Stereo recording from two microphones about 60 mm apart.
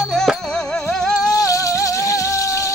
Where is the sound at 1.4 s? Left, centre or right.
Left.